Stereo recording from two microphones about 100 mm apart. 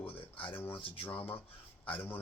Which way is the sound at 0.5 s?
20° left (ahead or behind).